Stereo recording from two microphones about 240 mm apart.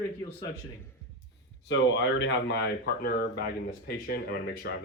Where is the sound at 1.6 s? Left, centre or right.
Left.